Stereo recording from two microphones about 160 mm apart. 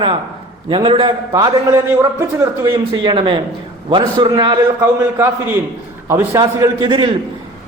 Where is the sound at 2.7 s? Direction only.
30° right (ahead or behind).